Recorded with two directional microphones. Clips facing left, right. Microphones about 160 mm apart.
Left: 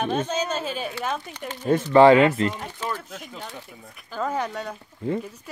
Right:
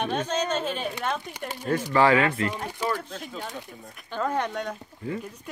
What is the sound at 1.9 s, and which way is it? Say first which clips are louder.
Speech: left 7 dB; 25° left (ahead or behind).